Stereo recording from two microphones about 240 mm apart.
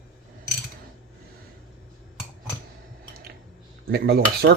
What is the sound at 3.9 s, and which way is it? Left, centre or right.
Speech, right.